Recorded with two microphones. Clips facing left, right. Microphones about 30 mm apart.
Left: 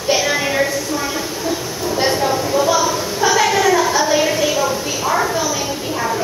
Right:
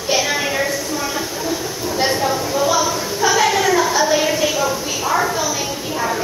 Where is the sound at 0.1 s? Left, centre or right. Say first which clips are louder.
Left 2 dB; centre.